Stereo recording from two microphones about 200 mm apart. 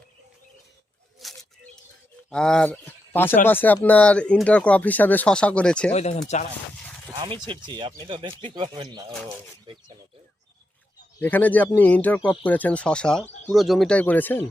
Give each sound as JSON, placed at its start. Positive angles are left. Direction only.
{"t": 1.2, "sound": "a sound", "side_deg": 0}
{"t": 2.3, "sound": "speech", "side_deg": 5}
{"t": 5.9, "sound": "speech", "side_deg": 35}
{"t": 7.1, "sound": "speech", "side_deg": -25}
{"t": 11.2, "sound": "speech", "side_deg": 10}